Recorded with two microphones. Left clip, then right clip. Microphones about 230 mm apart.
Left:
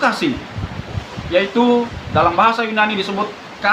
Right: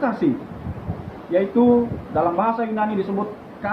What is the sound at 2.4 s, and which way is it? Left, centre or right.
Speech, centre.